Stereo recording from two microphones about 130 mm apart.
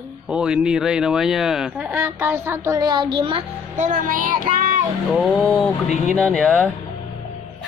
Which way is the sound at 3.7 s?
80° right.